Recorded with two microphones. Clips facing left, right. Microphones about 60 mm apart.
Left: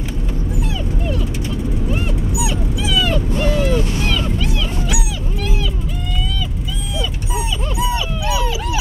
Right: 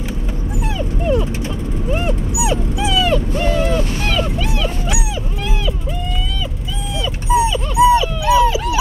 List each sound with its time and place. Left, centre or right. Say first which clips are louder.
2.0 s dog: right 2 dB; right
3.4 s dog: left 1 dB; right
7.3 s a sound: right 10 dB; right